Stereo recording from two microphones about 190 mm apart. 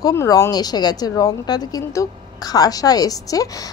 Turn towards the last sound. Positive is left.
turn(degrees=20)  # may be behind; listen again after turning